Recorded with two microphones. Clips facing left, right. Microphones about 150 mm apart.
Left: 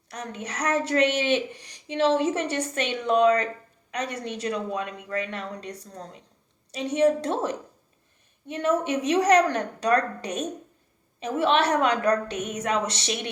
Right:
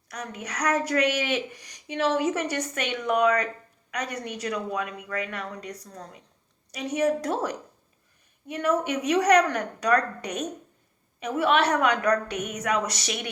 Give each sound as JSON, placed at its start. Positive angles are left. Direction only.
{"t": 0.1, "sound": "a woman's voice", "side_deg": 25}